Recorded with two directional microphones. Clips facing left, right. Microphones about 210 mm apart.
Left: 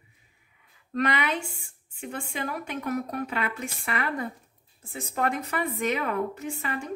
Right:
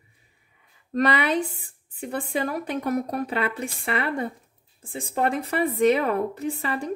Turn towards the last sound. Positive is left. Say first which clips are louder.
# right 5 dB
turn(degrees=-35)  # may be behind; listen again after turning